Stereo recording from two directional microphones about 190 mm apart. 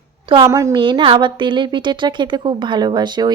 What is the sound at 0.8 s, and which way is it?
A woman's voice, 25° right (ahead or behind).